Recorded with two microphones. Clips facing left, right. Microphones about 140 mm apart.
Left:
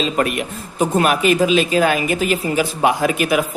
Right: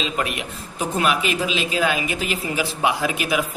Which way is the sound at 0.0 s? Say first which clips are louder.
Left 6 dB; 45° left (ahead or behind).